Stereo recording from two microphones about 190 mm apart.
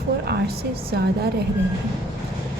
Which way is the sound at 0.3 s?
55° right (ahead or behind).